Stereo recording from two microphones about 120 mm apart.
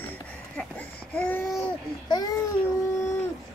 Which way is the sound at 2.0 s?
35° left (ahead or behind).